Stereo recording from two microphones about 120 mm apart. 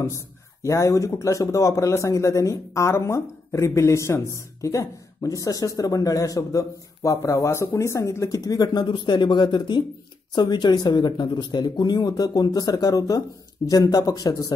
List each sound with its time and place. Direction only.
0.0 s speech: 25° left (ahead or behind)